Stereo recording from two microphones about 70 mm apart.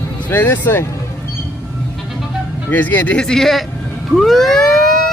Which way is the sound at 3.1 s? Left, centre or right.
Centre.